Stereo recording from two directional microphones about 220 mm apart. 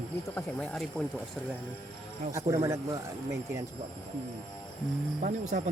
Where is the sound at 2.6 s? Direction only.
15° right (ahead or behind).